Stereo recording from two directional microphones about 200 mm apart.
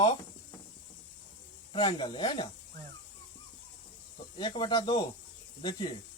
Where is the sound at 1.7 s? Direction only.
25° left (ahead or behind).